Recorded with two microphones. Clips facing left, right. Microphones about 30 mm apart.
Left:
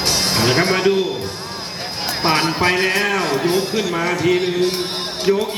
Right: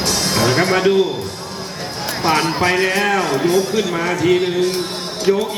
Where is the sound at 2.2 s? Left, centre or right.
Left.